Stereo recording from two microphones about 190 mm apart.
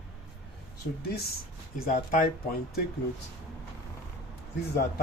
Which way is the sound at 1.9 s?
45° left (ahead or behind).